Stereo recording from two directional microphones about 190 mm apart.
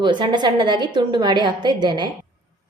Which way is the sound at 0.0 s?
25° right (ahead or behind).